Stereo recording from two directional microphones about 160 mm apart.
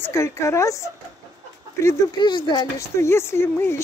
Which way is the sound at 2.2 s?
30° left (ahead or behind).